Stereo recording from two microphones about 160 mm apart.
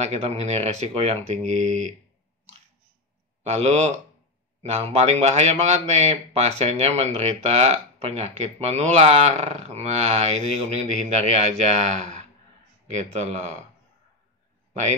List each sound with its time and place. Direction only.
0.0 s speech: 40° right (ahead or behind)
3.4 s speech: 40° right (ahead or behind)
14.7 s a man's voice: 45° right (ahead or behind)